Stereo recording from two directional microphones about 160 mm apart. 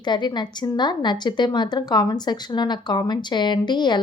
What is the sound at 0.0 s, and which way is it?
A woman's voice, 30° left (ahead or behind).